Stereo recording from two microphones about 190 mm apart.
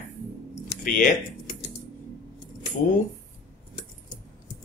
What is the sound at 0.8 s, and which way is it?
Speech, 45° left (ahead or behind).